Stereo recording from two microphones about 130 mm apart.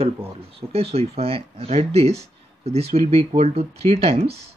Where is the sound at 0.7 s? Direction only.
50° right (ahead or behind).